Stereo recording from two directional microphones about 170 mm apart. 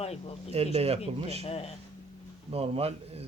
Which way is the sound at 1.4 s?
35° left (ahead or behind).